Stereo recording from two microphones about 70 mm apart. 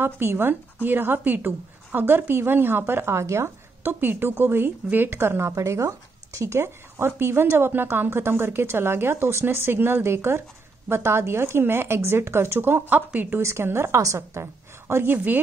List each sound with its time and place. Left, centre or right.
0.0 s speech: right
3.8 s speech: right
5.5 s a woman's voice: right
13.4 s speech: right